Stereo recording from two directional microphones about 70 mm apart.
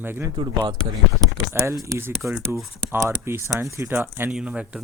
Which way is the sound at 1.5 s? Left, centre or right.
Right.